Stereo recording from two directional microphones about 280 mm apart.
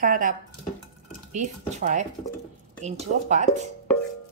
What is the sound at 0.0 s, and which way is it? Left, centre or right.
Speech, right.